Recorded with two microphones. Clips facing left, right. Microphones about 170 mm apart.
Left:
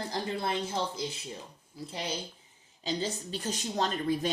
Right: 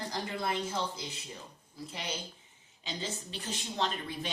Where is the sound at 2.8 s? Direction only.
40° left (ahead or behind).